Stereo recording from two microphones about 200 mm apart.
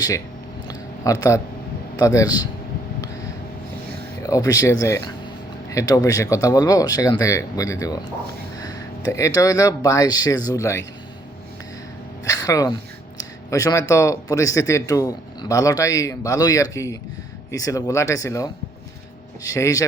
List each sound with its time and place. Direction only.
0.7 s a sound: 20° left (ahead or behind)
2.0 s a man's voice: 15° left (ahead or behind)
4.2 s speech: 15° left (ahead or behind)
9.1 s speech: 15° left (ahead or behind)
12.2 s speech: 15° left (ahead or behind)